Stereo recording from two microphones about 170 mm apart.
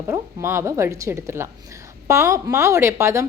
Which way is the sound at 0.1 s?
15° right (ahead or behind).